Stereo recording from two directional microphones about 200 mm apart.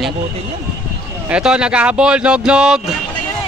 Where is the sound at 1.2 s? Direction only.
5° right (ahead or behind).